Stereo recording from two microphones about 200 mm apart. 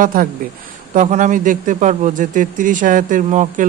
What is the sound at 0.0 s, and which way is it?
Speech, 45° right (ahead or behind).